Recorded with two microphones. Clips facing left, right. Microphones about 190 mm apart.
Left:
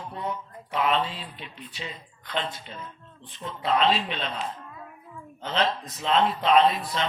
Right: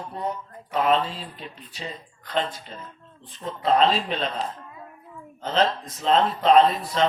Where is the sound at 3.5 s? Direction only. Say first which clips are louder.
Right 3 dB; 40° right (ahead or behind).